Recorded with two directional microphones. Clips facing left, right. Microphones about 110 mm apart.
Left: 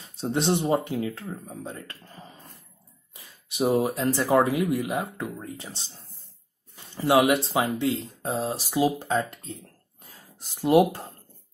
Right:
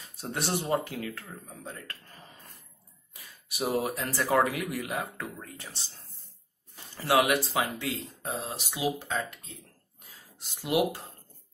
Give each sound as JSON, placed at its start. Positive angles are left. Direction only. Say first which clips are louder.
{"t": 0.0, "sound": "speech", "louder": "left 8 dB", "side_deg": 25}
{"t": 7.0, "sound": "speech", "louder": "left 4 dB", "side_deg": 20}
{"t": 10.6, "sound": "speech", "louder": "left 8 dB", "side_deg": 45}